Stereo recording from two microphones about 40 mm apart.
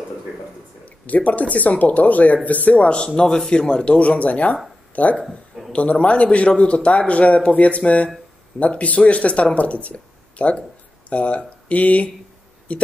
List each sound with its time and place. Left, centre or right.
0.8 s speech: left
3.2 s speech: centre; by 9.5 s left
9.9 s a sound: left
11.1 s speech: left